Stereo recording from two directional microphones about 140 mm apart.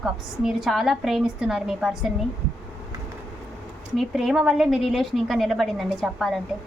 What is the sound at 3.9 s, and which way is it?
A woman's voice, centre (ahead or behind).